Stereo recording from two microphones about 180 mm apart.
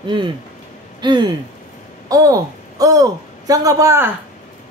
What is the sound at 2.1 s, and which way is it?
A woman's voice, 20° right (ahead or behind).